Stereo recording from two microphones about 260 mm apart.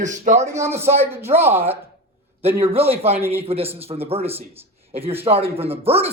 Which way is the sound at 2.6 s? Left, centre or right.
Right.